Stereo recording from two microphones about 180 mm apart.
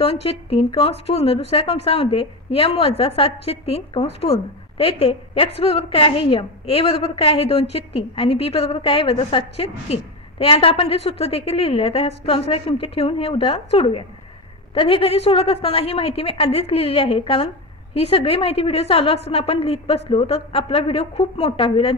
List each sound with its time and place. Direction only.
0.0 s a woman's voice: 35° left (ahead or behind)